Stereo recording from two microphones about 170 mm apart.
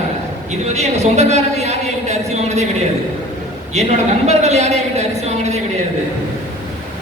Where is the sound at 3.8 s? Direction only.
40° right (ahead or behind).